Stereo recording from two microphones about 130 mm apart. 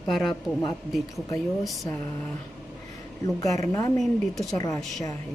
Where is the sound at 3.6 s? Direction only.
25° left (ahead or behind).